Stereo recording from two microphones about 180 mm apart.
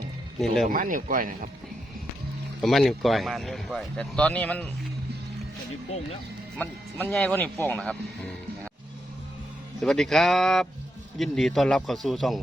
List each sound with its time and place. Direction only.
0.3 s speech: centre (ahead or behind)
0.7 s speech: 50° right (ahead or behind)
2.6 s speech: centre (ahead or behind)
6.6 s speech: 10° left (ahead or behind)
9.8 s speech: centre (ahead or behind)